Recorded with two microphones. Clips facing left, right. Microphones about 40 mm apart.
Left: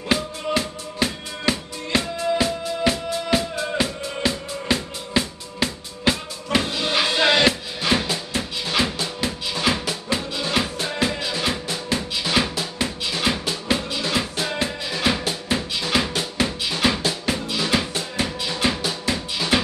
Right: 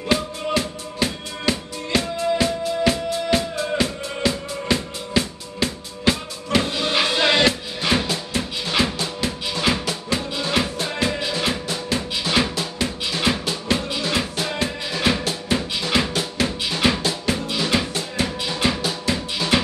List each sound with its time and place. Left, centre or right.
0.6 s music: centre